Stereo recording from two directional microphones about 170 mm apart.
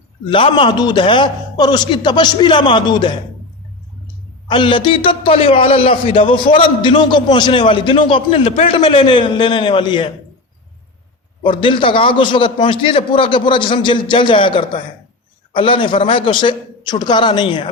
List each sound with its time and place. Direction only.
0.3 s a man's voice: 30° left (ahead or behind)
4.4 s a man's voice: 30° left (ahead or behind)
11.4 s a man's voice: 30° left (ahead or behind)